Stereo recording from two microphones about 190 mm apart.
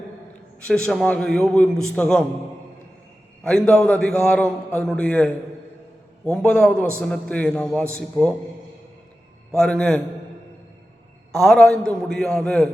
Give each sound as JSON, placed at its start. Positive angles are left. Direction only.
{"t": 0.7, "sound": "a man's voice", "side_deg": 5}
{"t": 3.4, "sound": "a man's voice", "side_deg": 5}
{"t": 9.5, "sound": "a man's voice", "side_deg": 5}
{"t": 11.3, "sound": "a man's voice", "side_deg": 0}